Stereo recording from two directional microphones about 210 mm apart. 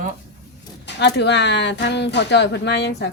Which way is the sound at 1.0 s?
55° left (ahead or behind).